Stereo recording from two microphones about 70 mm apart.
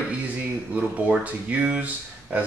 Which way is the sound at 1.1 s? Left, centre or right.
Right.